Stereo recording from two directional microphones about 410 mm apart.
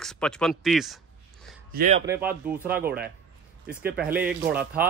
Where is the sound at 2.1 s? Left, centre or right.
Centre.